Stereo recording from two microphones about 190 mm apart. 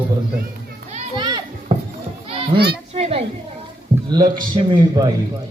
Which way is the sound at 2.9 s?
35° right (ahead or behind).